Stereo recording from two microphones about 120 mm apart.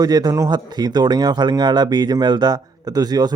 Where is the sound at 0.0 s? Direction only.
35° right (ahead or behind).